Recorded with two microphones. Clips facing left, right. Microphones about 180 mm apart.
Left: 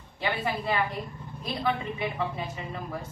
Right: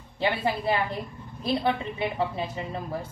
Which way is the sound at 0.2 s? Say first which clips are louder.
Right 4 dB; 25° right (ahead or behind).